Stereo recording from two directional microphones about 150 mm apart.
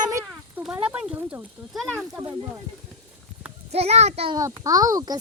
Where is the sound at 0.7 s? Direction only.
10° right (ahead or behind).